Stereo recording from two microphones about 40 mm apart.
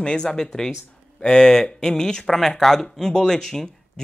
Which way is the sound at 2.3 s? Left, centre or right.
Centre.